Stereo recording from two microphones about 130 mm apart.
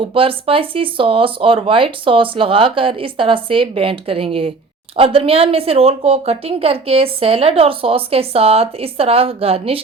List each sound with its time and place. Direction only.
0.0 s a woman's voice: 45° right (ahead or behind)